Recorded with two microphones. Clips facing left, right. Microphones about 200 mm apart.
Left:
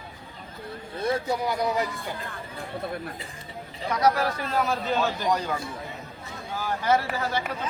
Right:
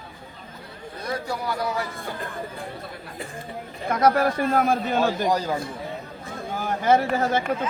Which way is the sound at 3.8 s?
55° right (ahead or behind).